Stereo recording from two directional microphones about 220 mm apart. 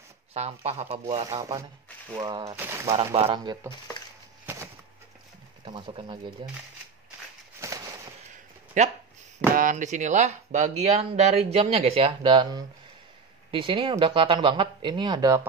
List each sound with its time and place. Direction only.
0.3 s speech: 30° right (ahead or behind)
1.0 s speech: 15° right (ahead or behind)
5.7 s speech: 20° right (ahead or behind)
7.6 s a sound: 15° right (ahead or behind)
8.8 s speech: 35° right (ahead or behind); by 15.4 s 15° right (ahead or behind)